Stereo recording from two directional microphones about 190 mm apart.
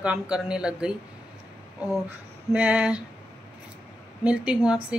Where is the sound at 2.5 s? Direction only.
10° right (ahead or behind).